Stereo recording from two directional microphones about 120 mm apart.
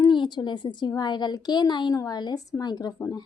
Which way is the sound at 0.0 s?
40° left (ahead or behind).